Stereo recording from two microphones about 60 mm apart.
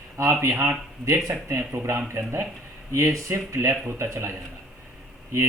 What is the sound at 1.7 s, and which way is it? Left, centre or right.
Speech, right.